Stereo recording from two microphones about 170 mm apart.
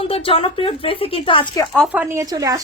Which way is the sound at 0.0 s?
35° left (ahead or behind).